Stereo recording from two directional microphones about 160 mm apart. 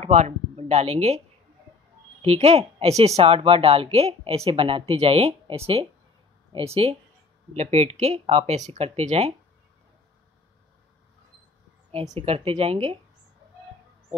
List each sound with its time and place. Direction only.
0.0 s speech: 45° right (ahead or behind)
2.2 s a woman's voice: 40° right (ahead or behind)
11.9 s speech: 40° right (ahead or behind)